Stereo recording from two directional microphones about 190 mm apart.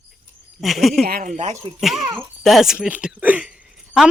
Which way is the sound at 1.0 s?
45° right (ahead or behind).